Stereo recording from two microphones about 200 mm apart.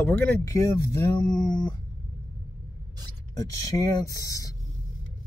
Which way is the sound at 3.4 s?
20° left (ahead or behind).